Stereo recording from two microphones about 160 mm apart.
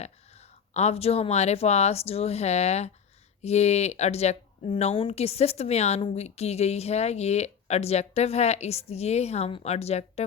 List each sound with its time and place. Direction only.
0.0 s speech: 45° left (ahead or behind)